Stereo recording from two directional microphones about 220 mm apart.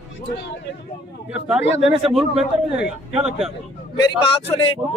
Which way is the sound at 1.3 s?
5° right (ahead or behind).